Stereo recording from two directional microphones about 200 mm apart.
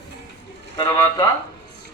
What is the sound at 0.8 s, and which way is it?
Speech, 20° left (ahead or behind).